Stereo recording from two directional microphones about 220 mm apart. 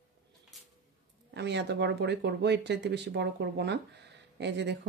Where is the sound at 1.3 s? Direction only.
50° right (ahead or behind).